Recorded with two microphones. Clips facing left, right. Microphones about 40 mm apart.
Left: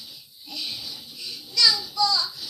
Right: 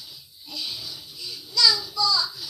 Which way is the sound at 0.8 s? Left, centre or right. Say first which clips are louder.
Even; centre.